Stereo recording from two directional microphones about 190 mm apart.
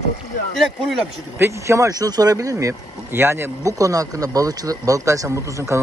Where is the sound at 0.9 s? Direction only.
5° right (ahead or behind).